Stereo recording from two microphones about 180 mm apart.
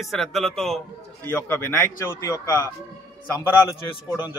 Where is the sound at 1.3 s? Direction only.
10° left (ahead or behind).